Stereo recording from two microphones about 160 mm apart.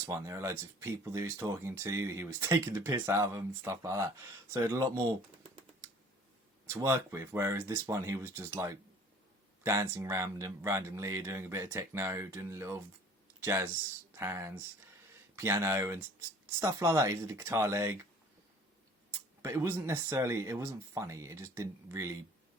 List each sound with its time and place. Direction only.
0.0 s speech: 20° right (ahead or behind)
6.7 s speech: 15° right (ahead or behind)
19.4 s speech: 15° right (ahead or behind)